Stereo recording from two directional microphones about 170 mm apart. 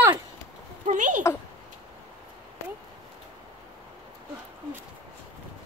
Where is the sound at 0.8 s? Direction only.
45° right (ahead or behind).